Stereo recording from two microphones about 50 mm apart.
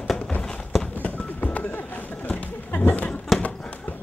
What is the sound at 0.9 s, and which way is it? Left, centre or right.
Music, left.